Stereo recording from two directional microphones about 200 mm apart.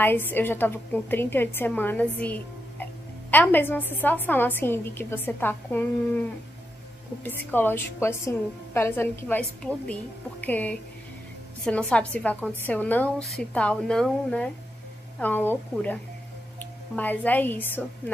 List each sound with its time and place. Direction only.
0.0 s a woman's voice: 10° left (ahead or behind)
7.2 s a woman's voice: 10° left (ahead or behind)